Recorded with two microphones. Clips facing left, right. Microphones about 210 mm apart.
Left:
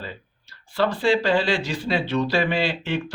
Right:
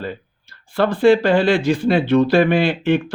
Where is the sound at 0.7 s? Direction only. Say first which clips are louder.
Right 7 dB; 55° right (ahead or behind).